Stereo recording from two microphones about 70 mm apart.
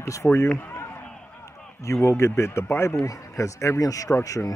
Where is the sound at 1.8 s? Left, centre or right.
Left.